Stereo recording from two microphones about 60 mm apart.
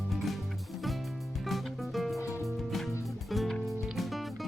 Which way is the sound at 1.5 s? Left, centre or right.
Centre.